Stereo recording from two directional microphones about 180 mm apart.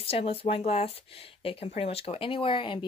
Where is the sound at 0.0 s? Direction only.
35° left (ahead or behind).